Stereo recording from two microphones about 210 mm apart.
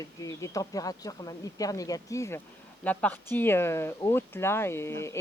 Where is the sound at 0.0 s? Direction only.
15° left (ahead or behind).